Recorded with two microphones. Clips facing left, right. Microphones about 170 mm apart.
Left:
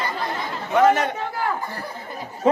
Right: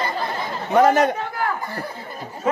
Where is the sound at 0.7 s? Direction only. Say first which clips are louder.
Right 2 dB; 40° right (ahead or behind).